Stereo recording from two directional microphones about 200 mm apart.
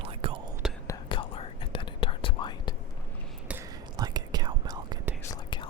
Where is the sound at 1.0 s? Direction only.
25° left (ahead or behind).